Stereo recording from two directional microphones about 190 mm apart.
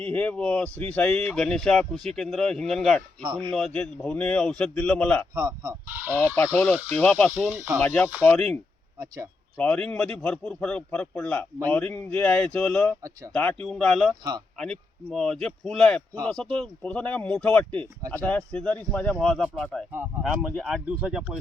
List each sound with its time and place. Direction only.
0.0 s a man's voice: 5° left (ahead or behind)
3.2 s speech: 25° right (ahead or behind)
3.5 s a man's voice: 5° left (ahead or behind)
5.3 s speech: 20° right (ahead or behind)
6.9 s speech: 10° left (ahead or behind)
7.3 s speech: 10° right (ahead or behind)
7.9 s speech: 15° left (ahead or behind)
9.0 s speech: 20° right (ahead or behind)
9.6 s a man's voice: 5° left (ahead or behind)